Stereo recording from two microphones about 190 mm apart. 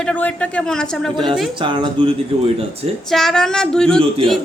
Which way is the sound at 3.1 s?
Centre (ahead or behind).